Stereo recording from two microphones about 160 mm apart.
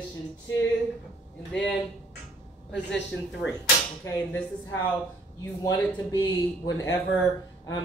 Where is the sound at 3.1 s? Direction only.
90° left.